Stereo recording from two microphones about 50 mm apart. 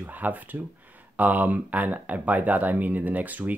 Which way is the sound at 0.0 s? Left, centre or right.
Right.